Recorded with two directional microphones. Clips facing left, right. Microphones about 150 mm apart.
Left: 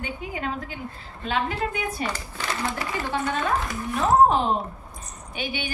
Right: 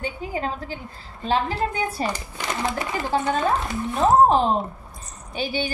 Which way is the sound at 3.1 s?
30° right (ahead or behind).